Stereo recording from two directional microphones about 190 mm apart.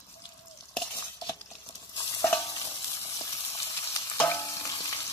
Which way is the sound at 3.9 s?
10° left (ahead or behind).